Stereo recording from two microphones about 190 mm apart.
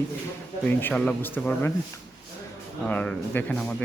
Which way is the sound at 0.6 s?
10° left (ahead or behind).